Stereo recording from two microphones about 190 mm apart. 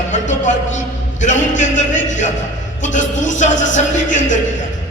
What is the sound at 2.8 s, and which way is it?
Speech, 40° left (ahead or behind).